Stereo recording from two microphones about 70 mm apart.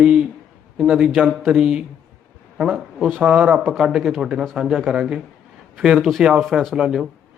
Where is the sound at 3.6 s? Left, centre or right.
Centre.